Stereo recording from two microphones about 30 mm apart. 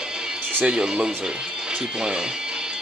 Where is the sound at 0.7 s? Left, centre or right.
Right.